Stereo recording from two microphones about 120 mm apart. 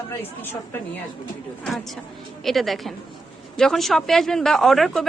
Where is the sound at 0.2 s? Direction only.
20° left (ahead or behind).